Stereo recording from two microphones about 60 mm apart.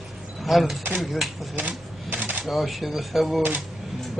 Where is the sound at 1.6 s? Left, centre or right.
Right.